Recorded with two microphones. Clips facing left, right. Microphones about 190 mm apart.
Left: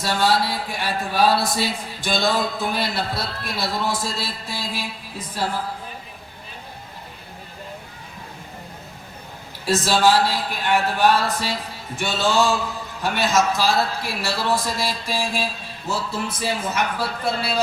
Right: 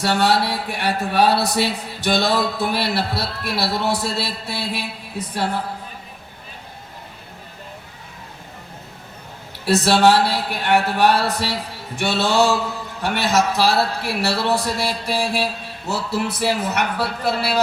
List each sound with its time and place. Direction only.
0.0 s speech: 65° right (ahead or behind)
9.8 s a man's voice: 65° right (ahead or behind)